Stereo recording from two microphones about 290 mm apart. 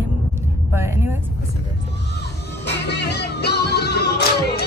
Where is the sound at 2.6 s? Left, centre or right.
Left.